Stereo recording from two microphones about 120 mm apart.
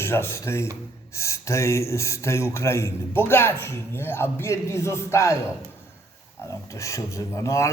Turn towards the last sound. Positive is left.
turn(degrees=25)  # may be behind; listen again after turning